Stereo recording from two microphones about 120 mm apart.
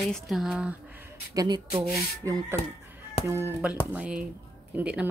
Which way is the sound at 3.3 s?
20° right (ahead or behind).